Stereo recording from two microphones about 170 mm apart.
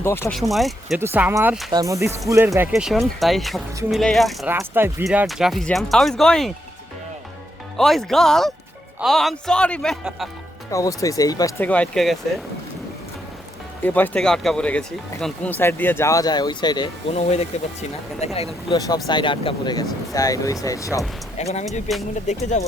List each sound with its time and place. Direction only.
0.0 s speech: 15° left (ahead or behind)
0.5 s speech: centre (ahead or behind)
0.9 s speech: 10° right (ahead or behind)
4.4 s speech: 15° right (ahead or behind)
5.0 s speech: centre (ahead or behind)
7.8 s speech: centre (ahead or behind)
10.7 s speech: 20° left (ahead or behind)
13.8 s speech: 10° left (ahead or behind); by 18.3 s 40° left (ahead or behind)
19.0 s speech: 25° left (ahead or behind)
21.3 s speech: 40° left (ahead or behind)
21.7 s speech: centre (ahead or behind)
22.3 s speech: 45° left (ahead or behind)